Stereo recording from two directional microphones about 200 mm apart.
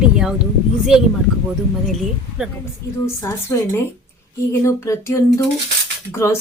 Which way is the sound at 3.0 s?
15° left (ahead or behind).